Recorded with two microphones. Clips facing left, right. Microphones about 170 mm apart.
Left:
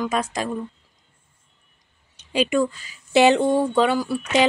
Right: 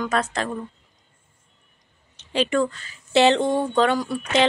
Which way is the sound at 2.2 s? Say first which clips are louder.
Left 1 dB; 10° left (ahead or behind).